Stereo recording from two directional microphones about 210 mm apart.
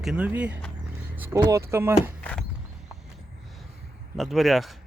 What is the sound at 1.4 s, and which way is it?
Speech, 15° right (ahead or behind).